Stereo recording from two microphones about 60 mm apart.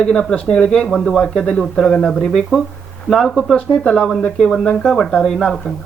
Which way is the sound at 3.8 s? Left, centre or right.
Centre.